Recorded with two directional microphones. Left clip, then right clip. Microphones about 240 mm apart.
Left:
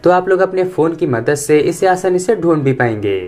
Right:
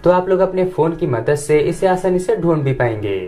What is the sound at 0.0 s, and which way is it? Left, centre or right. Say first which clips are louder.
Speech: left 2 dB; left.